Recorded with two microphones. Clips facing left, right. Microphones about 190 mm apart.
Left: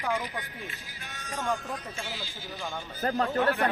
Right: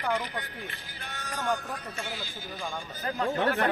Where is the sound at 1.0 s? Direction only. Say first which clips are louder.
Right 1 dB; 60° right (ahead or behind).